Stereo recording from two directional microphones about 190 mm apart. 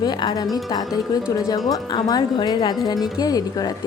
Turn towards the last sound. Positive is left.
turn(degrees=20)  # may be behind; listen again after turning